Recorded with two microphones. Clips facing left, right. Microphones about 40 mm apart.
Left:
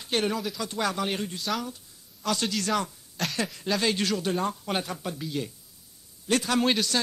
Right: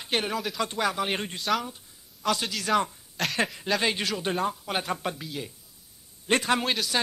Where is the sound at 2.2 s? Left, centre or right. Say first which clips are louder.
Even; centre.